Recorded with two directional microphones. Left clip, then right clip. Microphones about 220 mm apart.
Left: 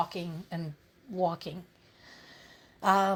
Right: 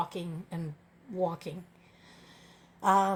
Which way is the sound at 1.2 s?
30° left (ahead or behind).